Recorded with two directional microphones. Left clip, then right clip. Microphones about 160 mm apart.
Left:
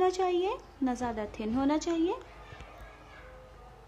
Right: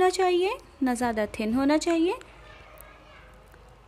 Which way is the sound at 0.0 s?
25° right (ahead or behind).